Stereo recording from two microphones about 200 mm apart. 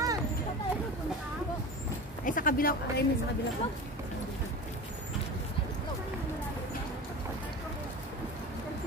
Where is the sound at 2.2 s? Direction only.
45° left (ahead or behind).